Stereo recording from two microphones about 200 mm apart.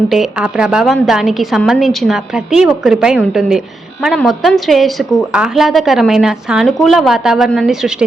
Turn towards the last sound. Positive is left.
turn(degrees=0)  # may be behind; listen again after turning